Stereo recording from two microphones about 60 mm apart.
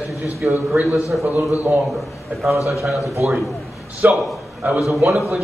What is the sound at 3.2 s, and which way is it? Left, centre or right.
Speech, right.